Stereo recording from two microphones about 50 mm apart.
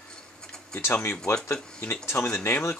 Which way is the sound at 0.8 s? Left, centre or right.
Left.